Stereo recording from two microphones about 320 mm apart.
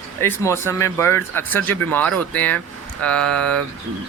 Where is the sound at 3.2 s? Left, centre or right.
Right.